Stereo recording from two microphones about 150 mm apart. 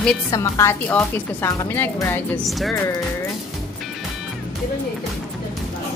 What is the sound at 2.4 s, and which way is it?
Speech, centre (ahead or behind).